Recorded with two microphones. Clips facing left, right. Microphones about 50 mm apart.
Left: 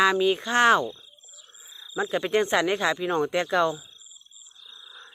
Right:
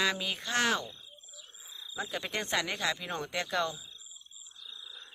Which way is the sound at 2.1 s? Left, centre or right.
Left.